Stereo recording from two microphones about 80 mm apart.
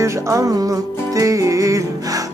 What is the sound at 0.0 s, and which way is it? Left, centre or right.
Music, right.